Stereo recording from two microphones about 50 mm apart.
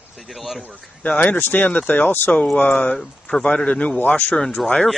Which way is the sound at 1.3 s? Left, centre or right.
Left.